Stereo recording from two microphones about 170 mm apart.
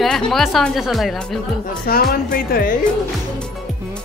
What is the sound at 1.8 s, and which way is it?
Speech, 60° left (ahead or behind).